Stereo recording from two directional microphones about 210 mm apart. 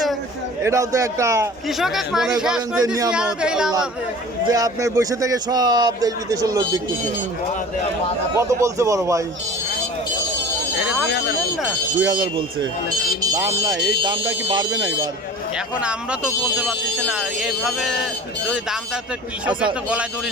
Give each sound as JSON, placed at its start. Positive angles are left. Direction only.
{"t": 0.6, "sound": "speech", "side_deg": -15}
{"t": 1.8, "sound": "speech", "side_deg": 0}
{"t": 2.8, "sound": "speech", "side_deg": -15}
{"t": 3.1, "sound": "speech", "side_deg": -5}
{"t": 4.4, "sound": "speech", "side_deg": -15}
{"t": 8.4, "sound": "speech", "side_deg": -15}
{"t": 10.8, "sound": "a sound", "side_deg": -5}
{"t": 12.0, "sound": "speech", "side_deg": -20}
{"t": 15.5, "sound": "speech", "side_deg": -5}